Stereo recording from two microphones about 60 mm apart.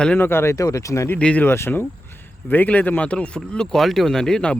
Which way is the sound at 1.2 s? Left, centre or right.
Left.